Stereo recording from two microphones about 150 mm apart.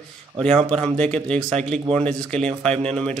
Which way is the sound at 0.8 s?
5° left (ahead or behind).